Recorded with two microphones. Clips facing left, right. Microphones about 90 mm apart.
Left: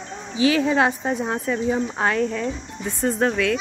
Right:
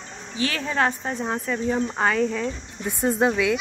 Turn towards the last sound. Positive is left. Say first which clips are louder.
# even
turn(degrees=-5)  # may be behind; listen again after turning